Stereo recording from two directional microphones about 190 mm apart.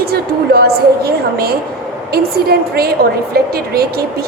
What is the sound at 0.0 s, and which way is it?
A woman's voice, 55° right (ahead or behind).